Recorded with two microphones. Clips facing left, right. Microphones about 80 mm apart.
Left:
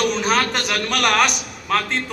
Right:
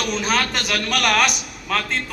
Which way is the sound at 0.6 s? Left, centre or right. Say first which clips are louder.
Left 1 dB; left.